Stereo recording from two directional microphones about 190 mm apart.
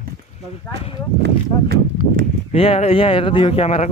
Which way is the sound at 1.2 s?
60° right (ahead or behind).